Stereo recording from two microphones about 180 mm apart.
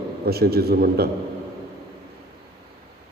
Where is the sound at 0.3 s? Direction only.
60° right (ahead or behind).